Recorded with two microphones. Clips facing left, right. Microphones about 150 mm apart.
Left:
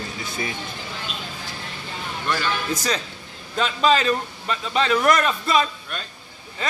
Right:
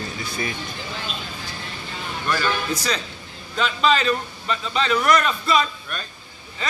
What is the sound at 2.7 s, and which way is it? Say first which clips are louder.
A man's voice: left 1 dB; 45° left (ahead or behind).